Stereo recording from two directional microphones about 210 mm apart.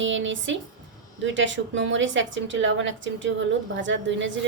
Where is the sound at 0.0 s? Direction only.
65° right (ahead or behind).